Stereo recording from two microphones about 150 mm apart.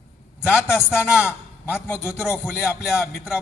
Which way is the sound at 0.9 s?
10° right (ahead or behind).